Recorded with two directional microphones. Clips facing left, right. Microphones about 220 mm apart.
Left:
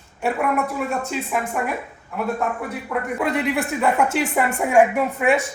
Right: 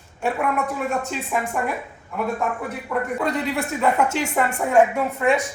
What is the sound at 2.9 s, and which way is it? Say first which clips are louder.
Speech: left 1 dB; 5° left (ahead or behind).